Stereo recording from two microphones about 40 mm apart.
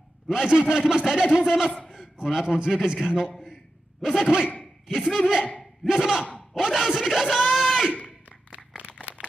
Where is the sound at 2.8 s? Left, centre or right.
Centre.